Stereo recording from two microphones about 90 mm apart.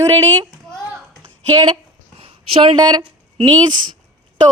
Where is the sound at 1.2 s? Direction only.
55° right (ahead or behind); by 2.7 s 90° right.